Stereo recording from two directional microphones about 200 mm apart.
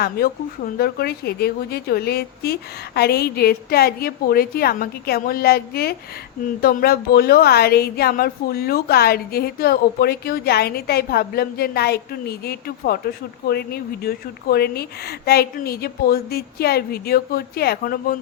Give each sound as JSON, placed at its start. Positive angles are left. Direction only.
{"t": 0.0, "sound": "speech", "side_deg": 50}